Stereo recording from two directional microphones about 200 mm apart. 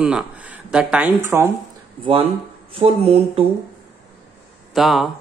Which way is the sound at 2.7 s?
30° right (ahead or behind).